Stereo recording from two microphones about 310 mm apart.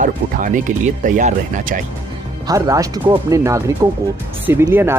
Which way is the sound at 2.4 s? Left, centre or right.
Centre.